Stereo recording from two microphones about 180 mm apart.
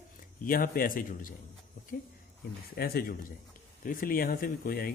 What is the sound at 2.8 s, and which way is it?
Speech, 55° left (ahead or behind).